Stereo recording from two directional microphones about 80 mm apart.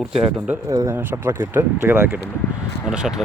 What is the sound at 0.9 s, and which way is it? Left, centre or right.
Speech, right.